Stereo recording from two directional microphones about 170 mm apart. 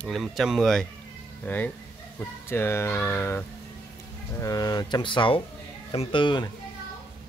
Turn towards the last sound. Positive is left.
turn(degrees=30)  # may be behind; listen again after turning